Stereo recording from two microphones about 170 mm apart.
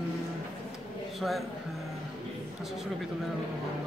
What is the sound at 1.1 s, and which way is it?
Speech, centre (ahead or behind).